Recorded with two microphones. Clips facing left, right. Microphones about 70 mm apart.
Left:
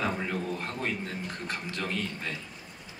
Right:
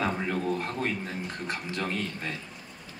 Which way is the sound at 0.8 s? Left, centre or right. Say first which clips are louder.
Right 2 dB; right.